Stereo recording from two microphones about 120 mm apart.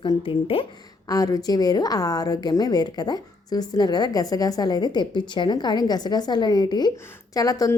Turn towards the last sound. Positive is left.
turn(degrees=30)  # may be behind; listen again after turning